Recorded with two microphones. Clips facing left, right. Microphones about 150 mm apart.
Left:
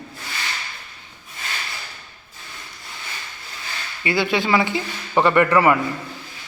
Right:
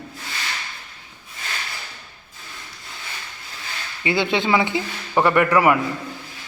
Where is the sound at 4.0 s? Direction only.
20° right (ahead or behind).